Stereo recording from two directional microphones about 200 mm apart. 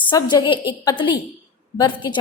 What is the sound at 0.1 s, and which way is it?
A woman's voice, 20° left (ahead or behind).